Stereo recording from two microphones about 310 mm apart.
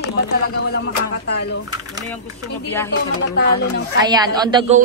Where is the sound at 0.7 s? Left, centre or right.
Left.